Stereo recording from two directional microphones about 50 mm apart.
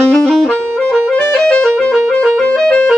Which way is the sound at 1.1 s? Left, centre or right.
Left.